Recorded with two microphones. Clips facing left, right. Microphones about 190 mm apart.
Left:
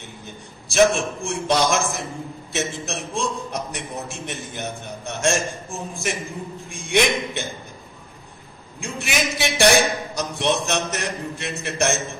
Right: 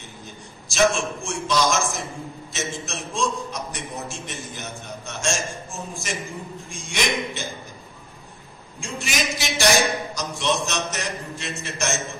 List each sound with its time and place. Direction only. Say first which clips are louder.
0.7 s a man's voice: left 3 dB; 60° left (ahead or behind)
8.8 s a man's voice: left 2 dB; 60° left (ahead or behind)